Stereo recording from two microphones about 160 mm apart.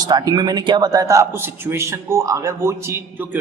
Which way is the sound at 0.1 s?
25° right (ahead or behind).